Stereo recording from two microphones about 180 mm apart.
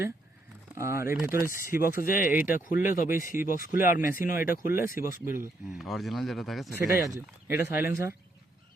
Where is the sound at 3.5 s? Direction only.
50° left (ahead or behind).